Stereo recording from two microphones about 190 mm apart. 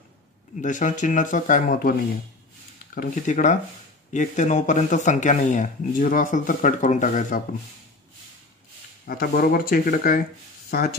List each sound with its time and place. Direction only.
0.6 s speech: 40° left (ahead or behind)
9.0 s speech: 50° left (ahead or behind)